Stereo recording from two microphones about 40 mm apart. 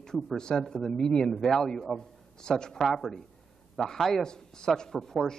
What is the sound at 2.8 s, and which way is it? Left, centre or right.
A man's voice, centre.